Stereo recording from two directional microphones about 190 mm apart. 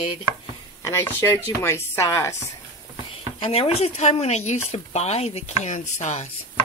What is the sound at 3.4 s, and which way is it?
Speech, 30° left (ahead or behind).